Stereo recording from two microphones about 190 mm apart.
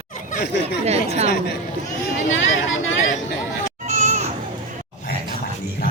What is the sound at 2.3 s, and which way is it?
Speech, 90° left.